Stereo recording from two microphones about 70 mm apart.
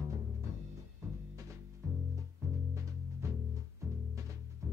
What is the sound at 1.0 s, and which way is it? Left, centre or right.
Music, right.